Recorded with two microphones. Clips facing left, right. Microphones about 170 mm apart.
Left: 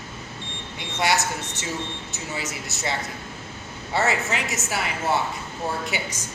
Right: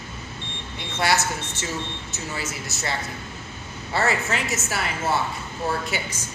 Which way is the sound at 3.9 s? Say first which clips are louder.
Even; 15° left (ahead or behind).